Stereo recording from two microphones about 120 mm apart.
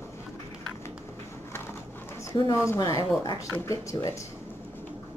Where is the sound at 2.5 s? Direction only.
25° left (ahead or behind).